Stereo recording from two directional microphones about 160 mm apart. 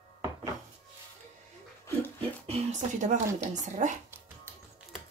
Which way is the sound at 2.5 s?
50° right (ahead or behind).